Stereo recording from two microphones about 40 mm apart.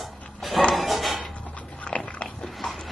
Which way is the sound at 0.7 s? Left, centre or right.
Centre.